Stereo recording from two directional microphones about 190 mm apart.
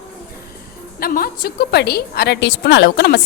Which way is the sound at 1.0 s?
50° left (ahead or behind).